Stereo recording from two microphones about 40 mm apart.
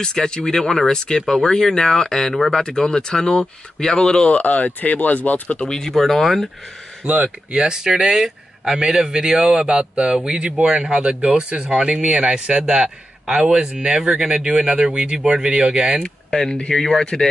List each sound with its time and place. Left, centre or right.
0.0 s speech: centre
2.6 s speech: centre
4.6 s speech: left
5.7 s speech: centre
7.1 s a man's voice: right
16.0 s speech: centre